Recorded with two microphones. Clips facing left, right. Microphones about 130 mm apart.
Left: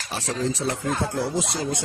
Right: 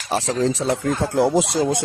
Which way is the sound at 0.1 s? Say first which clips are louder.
Right 7 dB; 90° right.